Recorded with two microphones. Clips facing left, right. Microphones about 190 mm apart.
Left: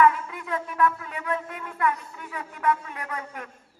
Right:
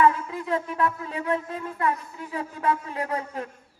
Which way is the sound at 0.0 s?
30° right (ahead or behind).